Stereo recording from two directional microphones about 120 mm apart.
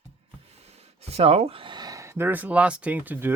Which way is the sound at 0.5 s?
60° right (ahead or behind).